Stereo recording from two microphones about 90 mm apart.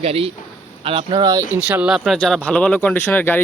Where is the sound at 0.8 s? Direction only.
70° right (ahead or behind).